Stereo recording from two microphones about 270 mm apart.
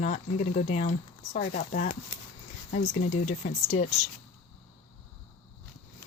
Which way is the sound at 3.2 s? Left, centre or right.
Left.